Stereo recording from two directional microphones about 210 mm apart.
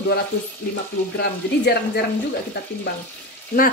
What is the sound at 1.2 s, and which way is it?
Speech, 50° left (ahead or behind).